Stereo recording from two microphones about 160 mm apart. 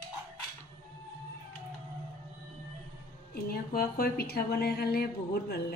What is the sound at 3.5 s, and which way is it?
A woman's voice, 75° left (ahead or behind).